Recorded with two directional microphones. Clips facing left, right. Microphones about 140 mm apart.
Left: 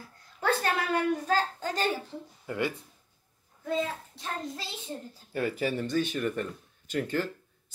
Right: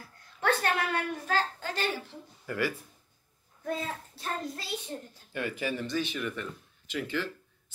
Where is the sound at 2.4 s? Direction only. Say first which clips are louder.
Even; 20° left (ahead or behind).